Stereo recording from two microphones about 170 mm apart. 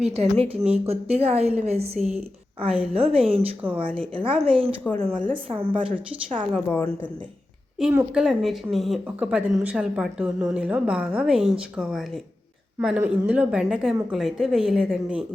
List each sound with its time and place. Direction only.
0.0 s a woman's voice: 35° right (ahead or behind)
6.5 s a woman's voice: 10° left (ahead or behind)
7.8 s a woman's voice: 5° right (ahead or behind)